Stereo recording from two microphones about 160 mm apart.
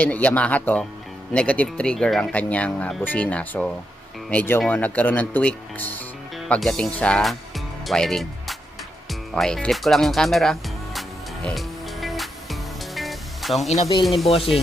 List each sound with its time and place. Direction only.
0.0 s speech: 10° left (ahead or behind)
11.4 s music: centre (ahead or behind)
14.0 s speech: centre (ahead or behind)
14.3 s speech: 35° left (ahead or behind)